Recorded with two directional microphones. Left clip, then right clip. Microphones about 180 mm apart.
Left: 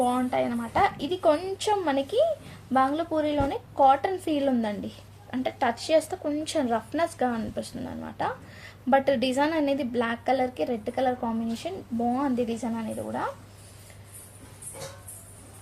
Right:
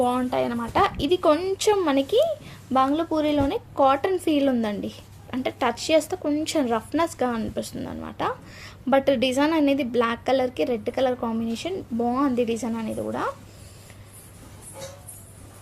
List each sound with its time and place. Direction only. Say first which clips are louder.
0.0 s a woman's voice: right 2 dB; 35° right (ahead or behind)